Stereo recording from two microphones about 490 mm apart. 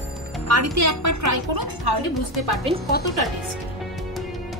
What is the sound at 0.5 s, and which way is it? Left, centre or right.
A woman's voice, right.